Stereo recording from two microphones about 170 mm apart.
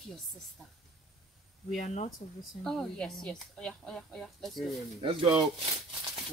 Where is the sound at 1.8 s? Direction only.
50° left (ahead or behind).